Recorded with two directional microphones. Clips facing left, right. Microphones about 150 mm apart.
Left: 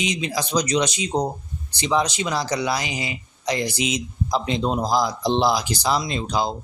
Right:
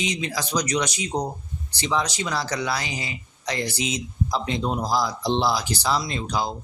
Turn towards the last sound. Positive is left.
turn(degrees=25)  # may be behind; listen again after turning